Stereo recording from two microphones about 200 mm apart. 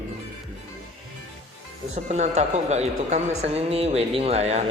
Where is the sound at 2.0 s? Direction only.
35° right (ahead or behind).